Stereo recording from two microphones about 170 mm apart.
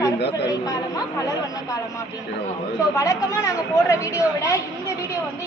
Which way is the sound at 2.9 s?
20° left (ahead or behind).